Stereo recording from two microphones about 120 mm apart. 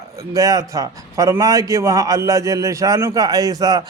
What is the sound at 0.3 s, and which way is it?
A man's voice, 30° right (ahead or behind).